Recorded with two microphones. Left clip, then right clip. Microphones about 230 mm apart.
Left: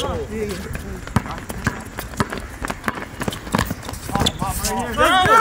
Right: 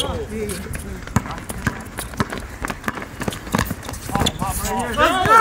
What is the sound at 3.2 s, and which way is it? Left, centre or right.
Clip-clop, centre.